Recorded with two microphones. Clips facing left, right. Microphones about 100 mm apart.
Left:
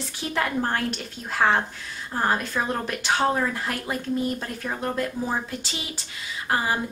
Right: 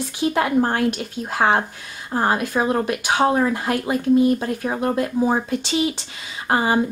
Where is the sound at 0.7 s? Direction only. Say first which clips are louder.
Right 7 dB; 15° right (ahead or behind).